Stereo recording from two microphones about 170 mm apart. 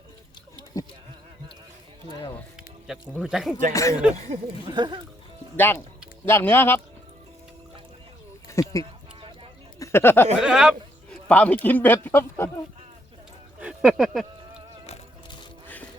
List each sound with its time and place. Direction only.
0.7 s speech: 20° left (ahead or behind)
3.2 s speech: 5° right (ahead or behind)
3.7 s speech: 20° left (ahead or behind)
4.1 s speech: 40° right (ahead or behind)
4.6 s speech: 30° right (ahead or behind)
5.5 s speech: 15° left (ahead or behind)
8.4 s a sound: 20° left (ahead or behind)
8.8 s a sound: 30° right (ahead or behind)
9.7 s a sound: 15° left (ahead or behind)
10.4 s a man's voice: 5° right (ahead or behind)
13.6 s speech: 5° right (ahead or behind)